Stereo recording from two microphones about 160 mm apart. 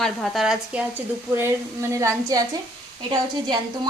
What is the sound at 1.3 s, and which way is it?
A woman's voice, 15° right (ahead or behind).